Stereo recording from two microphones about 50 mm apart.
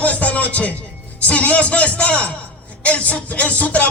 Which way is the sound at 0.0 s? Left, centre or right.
Left.